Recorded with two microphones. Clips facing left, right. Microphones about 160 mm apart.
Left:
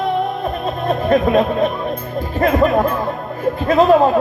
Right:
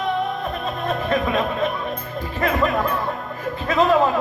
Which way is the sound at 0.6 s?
35° left (ahead or behind).